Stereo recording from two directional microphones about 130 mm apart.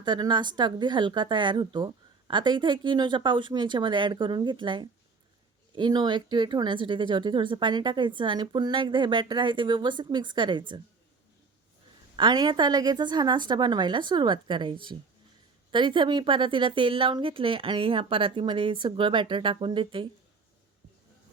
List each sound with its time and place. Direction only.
0.0 s speech: 35° right (ahead or behind)
12.1 s speech: 35° right (ahead or behind)